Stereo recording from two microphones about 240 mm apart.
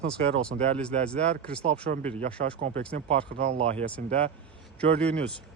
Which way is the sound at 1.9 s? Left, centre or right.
Right.